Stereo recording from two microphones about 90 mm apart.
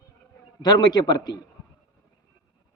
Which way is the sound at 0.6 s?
50° left (ahead or behind).